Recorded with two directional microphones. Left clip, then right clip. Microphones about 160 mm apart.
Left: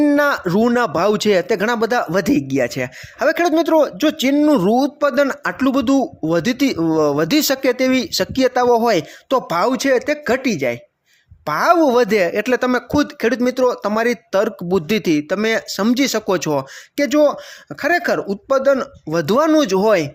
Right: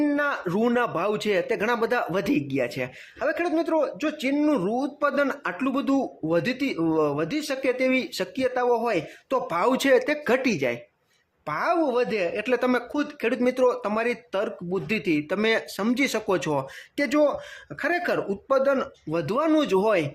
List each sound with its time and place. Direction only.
0.0 s a sound: 45° left (ahead or behind)
0.4 s speech: 35° left (ahead or behind)
4.9 s speech: 35° left (ahead or behind)
7.3 s speech: 55° left (ahead or behind); by 9.6 s 40° left (ahead or behind)
9.6 s speech: 20° left (ahead or behind)
11.4 s speech: 45° left (ahead or behind)
15.3 s speech: 30° left (ahead or behind)
19.1 s speech: 45° left (ahead or behind)
19.5 s speech: 30° left (ahead or behind)